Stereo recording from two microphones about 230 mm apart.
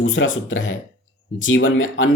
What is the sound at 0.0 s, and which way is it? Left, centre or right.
Speech, left.